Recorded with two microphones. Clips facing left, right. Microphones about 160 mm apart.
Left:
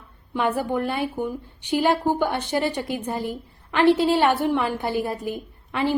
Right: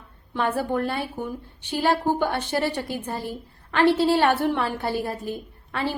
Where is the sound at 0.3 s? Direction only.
15° left (ahead or behind).